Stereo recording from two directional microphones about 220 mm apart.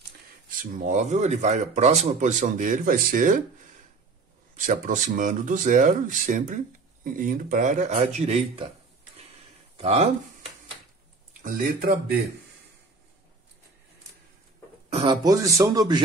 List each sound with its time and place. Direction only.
0.6 s speech: 35° right (ahead or behind)
4.6 s speech: 35° right (ahead or behind)
9.8 s speech: 25° right (ahead or behind)
11.4 s speech: 35° right (ahead or behind)
14.9 s speech: 25° right (ahead or behind)
15.2 s speech: 15° right (ahead or behind)